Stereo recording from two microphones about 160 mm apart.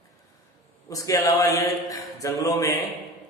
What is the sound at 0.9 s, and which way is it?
Speech, 20° left (ahead or behind).